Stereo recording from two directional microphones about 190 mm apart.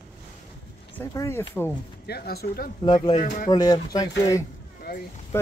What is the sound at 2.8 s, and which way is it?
Speech, 25° left (ahead or behind).